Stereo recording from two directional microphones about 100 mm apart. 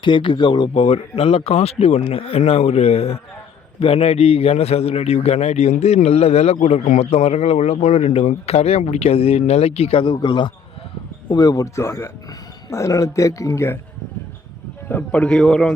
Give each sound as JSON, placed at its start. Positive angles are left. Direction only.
{"t": 0.0, "sound": "speech", "side_deg": 55}
{"t": 0.7, "sound": "a man's voice", "side_deg": 60}
{"t": 3.8, "sound": "a man's voice", "side_deg": 80}
{"t": 10.0, "sound": "speech", "side_deg": 50}
{"t": 11.3, "sound": "speech", "side_deg": 40}
{"t": 14.8, "sound": "a man's voice", "side_deg": 15}